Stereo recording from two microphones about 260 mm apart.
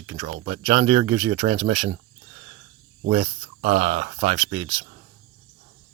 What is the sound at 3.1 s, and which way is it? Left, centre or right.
Speech, right.